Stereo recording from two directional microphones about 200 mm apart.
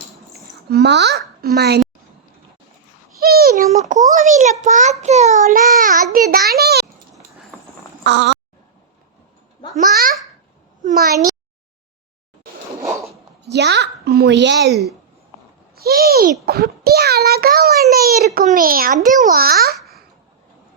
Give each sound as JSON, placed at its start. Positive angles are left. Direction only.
{"t": 0.7, "sound": "a child's voice", "side_deg": -55}
{"t": 3.2, "sound": "a sound", "side_deg": -50}
{"t": 3.7, "sound": "child singing", "side_deg": -40}
{"t": 8.0, "sound": "a sound", "side_deg": -60}
{"t": 9.7, "sound": "a child's voice", "side_deg": -45}
{"t": 12.8, "sound": "zipper", "side_deg": -15}
{"t": 13.4, "sound": "a child's voice", "side_deg": -55}
{"t": 17.9, "sound": "baby cry", "side_deg": -50}
{"t": 18.3, "sound": "a child's voice", "side_deg": -45}